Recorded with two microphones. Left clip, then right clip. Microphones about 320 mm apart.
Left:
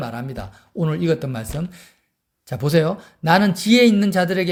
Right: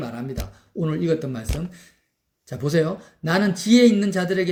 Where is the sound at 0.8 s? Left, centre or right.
Left.